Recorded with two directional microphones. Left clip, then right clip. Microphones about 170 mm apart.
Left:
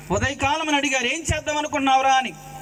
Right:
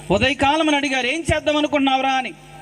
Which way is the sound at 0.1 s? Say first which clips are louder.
Right 5 dB; 40° right (ahead or behind).